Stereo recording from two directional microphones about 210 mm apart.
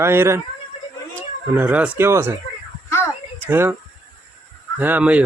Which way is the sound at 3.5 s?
10° right (ahead or behind).